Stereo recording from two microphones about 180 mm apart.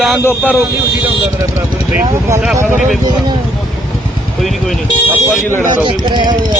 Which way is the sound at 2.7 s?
45° right (ahead or behind).